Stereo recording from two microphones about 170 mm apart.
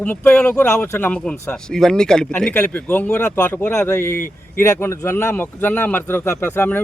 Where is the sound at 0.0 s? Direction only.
10° left (ahead or behind).